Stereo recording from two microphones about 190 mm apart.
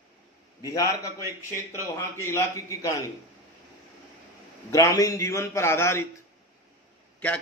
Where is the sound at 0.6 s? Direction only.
20° left (ahead or behind).